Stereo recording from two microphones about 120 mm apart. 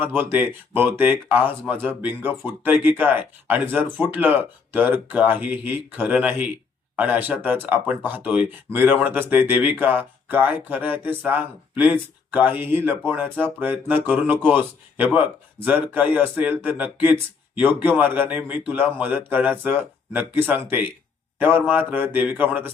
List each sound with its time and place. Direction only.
0.0 s speech: 15° right (ahead or behind)